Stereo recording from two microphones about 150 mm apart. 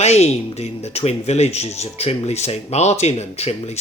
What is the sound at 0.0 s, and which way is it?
Speech, 45° left (ahead or behind).